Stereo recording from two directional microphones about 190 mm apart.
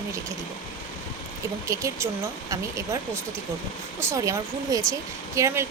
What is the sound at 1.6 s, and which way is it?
Speech, 15° right (ahead or behind).